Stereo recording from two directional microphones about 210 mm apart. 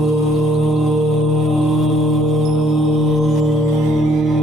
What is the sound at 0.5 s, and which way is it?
Mantra, centre (ahead or behind).